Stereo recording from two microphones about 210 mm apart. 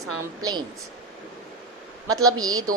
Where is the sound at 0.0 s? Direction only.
20° right (ahead or behind).